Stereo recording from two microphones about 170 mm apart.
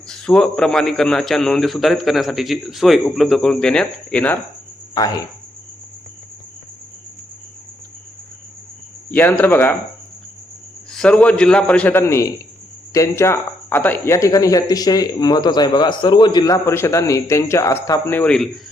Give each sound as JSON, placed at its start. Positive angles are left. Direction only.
{"t": 0.1, "sound": "a man's voice", "side_deg": 5}
{"t": 4.9, "sound": "speech", "side_deg": 20}
{"t": 9.1, "sound": "a man's voice", "side_deg": 10}
{"t": 10.9, "sound": "a man's voice", "side_deg": 5}